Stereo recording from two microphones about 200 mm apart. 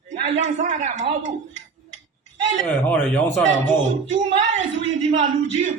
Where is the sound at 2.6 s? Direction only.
5° left (ahead or behind).